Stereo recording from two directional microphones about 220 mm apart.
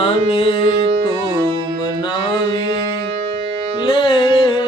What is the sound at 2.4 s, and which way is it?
Music, 20° left (ahead or behind).